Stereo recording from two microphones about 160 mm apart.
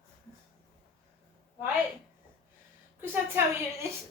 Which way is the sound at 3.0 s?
15° right (ahead or behind).